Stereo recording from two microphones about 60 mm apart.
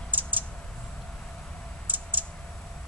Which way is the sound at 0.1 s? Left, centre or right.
Right.